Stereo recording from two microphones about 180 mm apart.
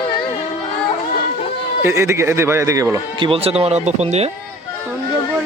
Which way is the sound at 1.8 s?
15° right (ahead or behind).